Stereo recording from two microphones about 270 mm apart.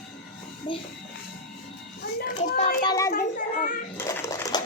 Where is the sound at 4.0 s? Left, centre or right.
Centre.